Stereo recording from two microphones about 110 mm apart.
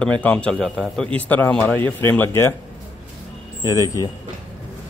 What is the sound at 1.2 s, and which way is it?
Speech, 15° left (ahead or behind).